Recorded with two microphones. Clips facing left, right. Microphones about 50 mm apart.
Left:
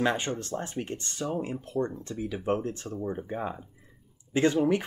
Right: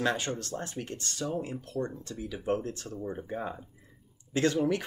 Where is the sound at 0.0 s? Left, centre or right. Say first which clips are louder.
Left 2 dB; left.